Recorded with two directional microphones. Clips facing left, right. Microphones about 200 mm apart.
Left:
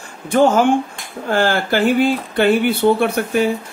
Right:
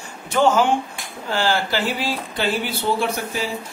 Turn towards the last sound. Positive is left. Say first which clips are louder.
# left 8 dB
turn(degrees=60)  # may be behind; listen again after turning